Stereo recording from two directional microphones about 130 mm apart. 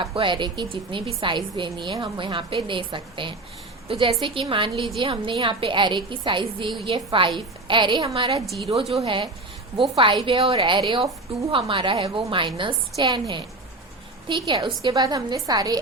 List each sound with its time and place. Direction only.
0.0 s a woman's voice: 40° right (ahead or behind)